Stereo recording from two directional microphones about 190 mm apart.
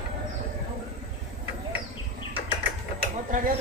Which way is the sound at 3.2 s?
45° right (ahead or behind).